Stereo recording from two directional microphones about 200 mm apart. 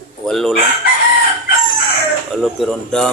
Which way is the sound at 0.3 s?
Centre (ahead or behind).